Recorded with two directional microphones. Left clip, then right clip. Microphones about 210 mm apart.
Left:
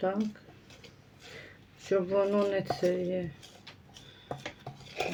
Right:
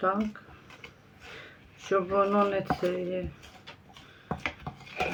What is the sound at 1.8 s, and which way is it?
Speech, 20° left (ahead or behind).